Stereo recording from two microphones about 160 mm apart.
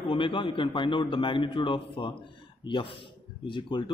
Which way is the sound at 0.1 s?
30° left (ahead or behind).